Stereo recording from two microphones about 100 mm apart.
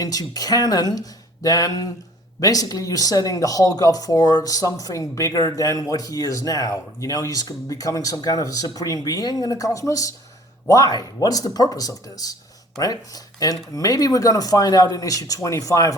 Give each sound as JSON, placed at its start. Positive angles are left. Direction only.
{"t": 0.0, "sound": "speech", "side_deg": 40}